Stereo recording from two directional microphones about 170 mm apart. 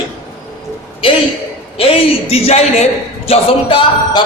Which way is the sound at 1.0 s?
30° left (ahead or behind).